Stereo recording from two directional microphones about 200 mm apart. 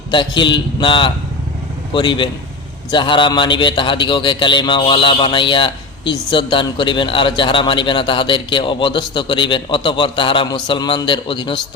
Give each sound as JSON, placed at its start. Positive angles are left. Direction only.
{"t": 0.1, "sound": "a man's voice", "side_deg": 25}